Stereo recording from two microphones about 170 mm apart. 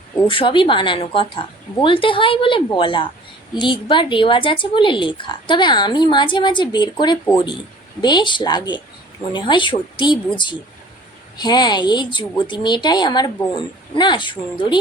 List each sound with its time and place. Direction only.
0.3 s a woman's voice: 30° left (ahead or behind)